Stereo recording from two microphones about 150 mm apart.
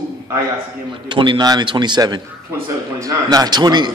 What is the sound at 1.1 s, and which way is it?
A man's voice, 30° right (ahead or behind).